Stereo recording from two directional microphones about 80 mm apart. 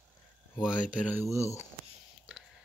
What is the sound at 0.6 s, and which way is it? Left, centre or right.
Speech, centre.